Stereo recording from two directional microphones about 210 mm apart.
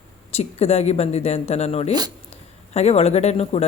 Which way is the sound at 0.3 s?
30° left (ahead or behind).